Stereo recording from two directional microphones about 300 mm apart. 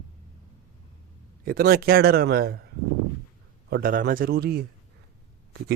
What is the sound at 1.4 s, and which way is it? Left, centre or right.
Speech, right.